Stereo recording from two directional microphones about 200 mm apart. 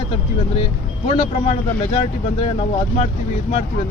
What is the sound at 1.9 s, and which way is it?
Speech, 30° left (ahead or behind).